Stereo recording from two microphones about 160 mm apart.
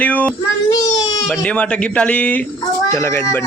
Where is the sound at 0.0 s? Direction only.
10° left (ahead or behind).